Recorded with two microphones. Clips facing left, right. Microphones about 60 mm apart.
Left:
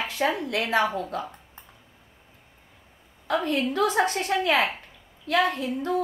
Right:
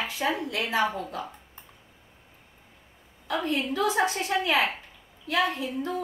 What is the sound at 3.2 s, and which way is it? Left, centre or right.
A woman's voice, left.